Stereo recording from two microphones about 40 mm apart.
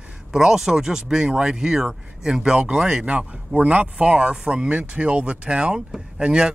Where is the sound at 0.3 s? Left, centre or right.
Centre.